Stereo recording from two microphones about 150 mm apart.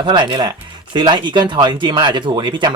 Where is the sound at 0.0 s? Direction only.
30° right (ahead or behind).